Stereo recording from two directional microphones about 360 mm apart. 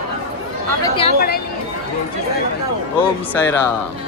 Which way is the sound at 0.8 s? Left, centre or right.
Centre.